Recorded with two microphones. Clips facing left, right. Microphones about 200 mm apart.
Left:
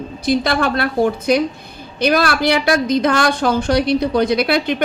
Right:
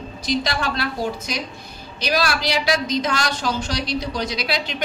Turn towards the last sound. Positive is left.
turn(degrees=55)  # may be behind; listen again after turning